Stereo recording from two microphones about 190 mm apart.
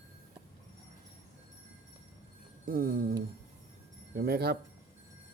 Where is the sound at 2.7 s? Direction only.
50° right (ahead or behind).